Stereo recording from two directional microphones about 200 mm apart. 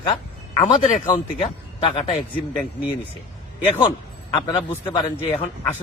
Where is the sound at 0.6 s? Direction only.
30° left (ahead or behind).